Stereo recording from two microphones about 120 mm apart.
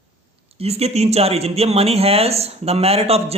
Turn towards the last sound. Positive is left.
turn(degrees=-60)  # may be behind; listen again after turning